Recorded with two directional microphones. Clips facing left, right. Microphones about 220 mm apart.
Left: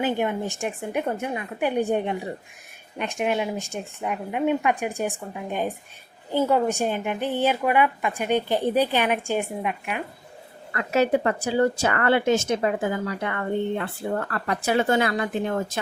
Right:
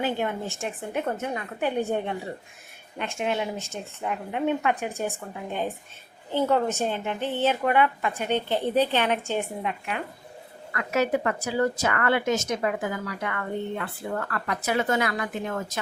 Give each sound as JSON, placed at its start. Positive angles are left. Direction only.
{"t": 0.0, "sound": "a woman's voice", "side_deg": 15}
{"t": 10.7, "sound": "a woman's voice", "side_deg": 30}